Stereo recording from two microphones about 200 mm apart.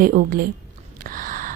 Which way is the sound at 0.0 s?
45° right (ahead or behind).